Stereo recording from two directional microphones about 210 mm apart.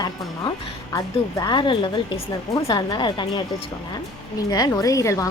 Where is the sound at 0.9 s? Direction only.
20° left (ahead or behind).